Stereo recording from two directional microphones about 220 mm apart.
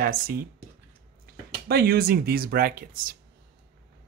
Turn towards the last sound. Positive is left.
turn(degrees=-40)  # may be behind; listen again after turning